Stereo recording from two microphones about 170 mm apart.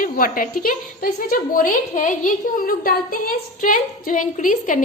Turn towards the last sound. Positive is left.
turn(degrees=50)  # may be behind; listen again after turning